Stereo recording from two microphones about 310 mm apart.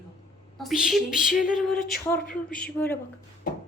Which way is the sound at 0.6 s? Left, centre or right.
Centre.